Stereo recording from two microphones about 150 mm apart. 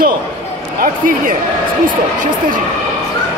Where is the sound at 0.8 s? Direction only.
70° right (ahead or behind).